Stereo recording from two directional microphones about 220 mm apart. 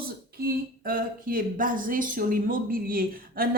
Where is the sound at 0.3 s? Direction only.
45° right (ahead or behind).